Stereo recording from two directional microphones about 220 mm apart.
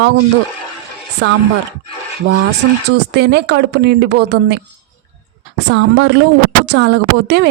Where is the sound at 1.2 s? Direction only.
50° right (ahead or behind).